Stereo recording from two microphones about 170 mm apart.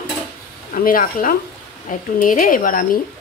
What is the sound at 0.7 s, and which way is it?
Speech, 55° left (ahead or behind).